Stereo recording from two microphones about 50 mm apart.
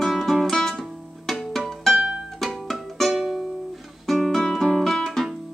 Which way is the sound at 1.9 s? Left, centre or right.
Centre.